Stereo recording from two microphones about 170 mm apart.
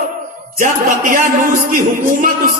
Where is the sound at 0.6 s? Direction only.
50° right (ahead or behind).